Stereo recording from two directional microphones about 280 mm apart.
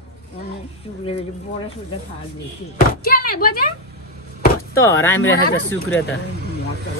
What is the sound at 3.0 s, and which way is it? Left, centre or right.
Speech, left.